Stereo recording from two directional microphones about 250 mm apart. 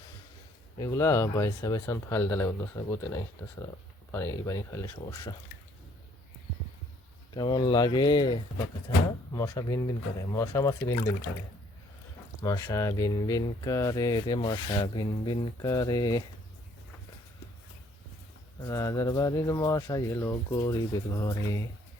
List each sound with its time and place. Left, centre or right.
0.8 s speech: centre
7.3 s speech: centre
12.4 s speech: centre
18.6 s speech: centre